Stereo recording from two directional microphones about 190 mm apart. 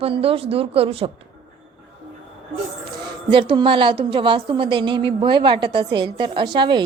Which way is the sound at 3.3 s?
25° right (ahead or behind).